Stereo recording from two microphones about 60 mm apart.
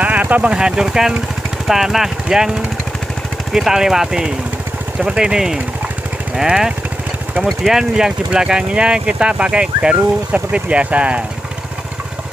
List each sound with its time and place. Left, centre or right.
0.0 s speech: right
3.5 s speech: centre